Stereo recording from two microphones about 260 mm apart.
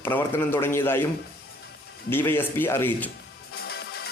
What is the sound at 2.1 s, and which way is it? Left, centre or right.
A man's voice, centre.